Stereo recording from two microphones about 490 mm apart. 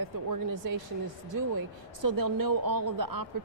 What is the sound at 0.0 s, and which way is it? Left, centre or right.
Speech, right.